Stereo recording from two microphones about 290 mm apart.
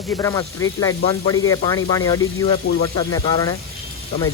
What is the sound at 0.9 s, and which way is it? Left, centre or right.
Speech, left.